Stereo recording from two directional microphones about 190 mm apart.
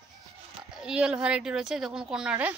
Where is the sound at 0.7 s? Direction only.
5° right (ahead or behind).